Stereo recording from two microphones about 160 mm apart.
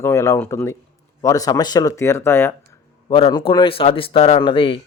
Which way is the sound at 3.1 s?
35° left (ahead or behind).